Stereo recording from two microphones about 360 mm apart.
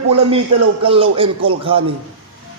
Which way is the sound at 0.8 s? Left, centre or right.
Centre.